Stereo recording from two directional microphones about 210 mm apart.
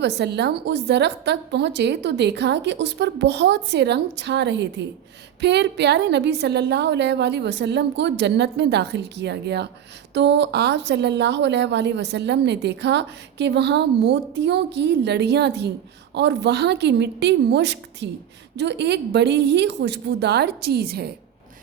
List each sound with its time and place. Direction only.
0.0 s a woman's voice: 55° right (ahead or behind)